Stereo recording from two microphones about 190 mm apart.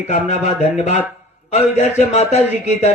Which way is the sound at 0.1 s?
35° left (ahead or behind).